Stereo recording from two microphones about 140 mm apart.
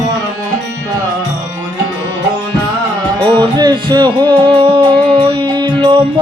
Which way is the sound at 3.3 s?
30° right (ahead or behind).